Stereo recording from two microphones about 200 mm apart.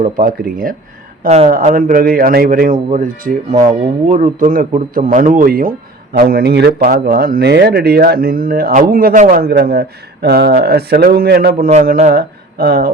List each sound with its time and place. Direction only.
0.0 s speech: 50° right (ahead or behind)
11.7 s speech: 35° right (ahead or behind)